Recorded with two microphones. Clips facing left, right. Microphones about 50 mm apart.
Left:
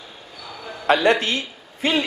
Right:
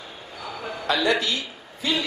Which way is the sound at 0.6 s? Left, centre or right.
Right.